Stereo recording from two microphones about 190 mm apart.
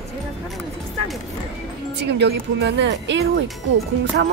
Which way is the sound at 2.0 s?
65° right (ahead or behind).